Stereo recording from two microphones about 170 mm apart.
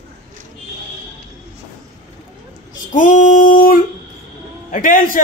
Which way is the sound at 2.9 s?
50° left (ahead or behind).